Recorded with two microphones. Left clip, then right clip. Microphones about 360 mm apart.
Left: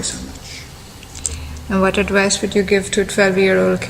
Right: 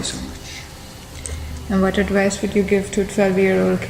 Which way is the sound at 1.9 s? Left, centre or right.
Left.